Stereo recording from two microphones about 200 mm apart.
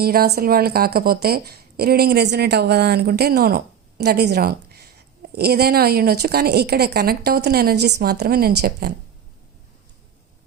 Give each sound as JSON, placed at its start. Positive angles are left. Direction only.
{"t": 0.0, "sound": "speech", "side_deg": -50}